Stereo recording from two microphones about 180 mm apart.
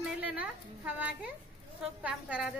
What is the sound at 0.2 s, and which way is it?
A woman's voice, 10° right (ahead or behind).